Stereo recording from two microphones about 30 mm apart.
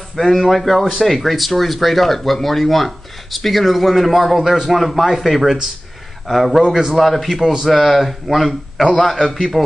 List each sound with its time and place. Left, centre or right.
0.3 s speech: centre
6.6 s a man's voice: centre
6.9 s speech: centre
7.3 s a man's voice: centre
9.2 s speech: centre